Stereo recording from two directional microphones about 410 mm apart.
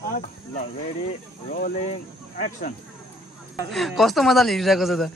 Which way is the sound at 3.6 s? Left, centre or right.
Centre.